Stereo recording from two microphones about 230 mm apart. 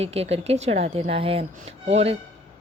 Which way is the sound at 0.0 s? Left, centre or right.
Right.